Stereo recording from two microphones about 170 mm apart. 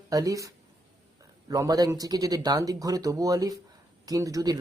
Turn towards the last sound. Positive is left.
turn(degrees=-20)  # may be behind; listen again after turning